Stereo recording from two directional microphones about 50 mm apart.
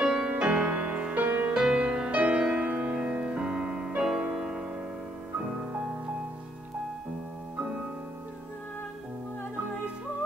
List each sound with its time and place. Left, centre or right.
0.0 s music: centre